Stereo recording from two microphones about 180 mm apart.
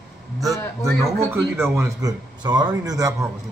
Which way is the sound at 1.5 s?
15° right (ahead or behind).